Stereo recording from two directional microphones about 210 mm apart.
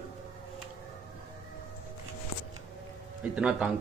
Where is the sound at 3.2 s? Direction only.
5° right (ahead or behind).